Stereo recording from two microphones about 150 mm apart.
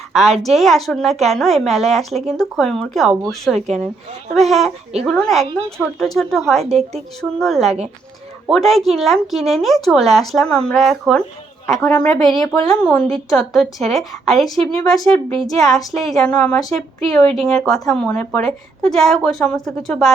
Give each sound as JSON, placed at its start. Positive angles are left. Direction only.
{"t": 0.1, "sound": "speech", "side_deg": 0}
{"t": 6.7, "sound": "a woman's voice", "side_deg": -45}
{"t": 7.2, "sound": "speech", "side_deg": 0}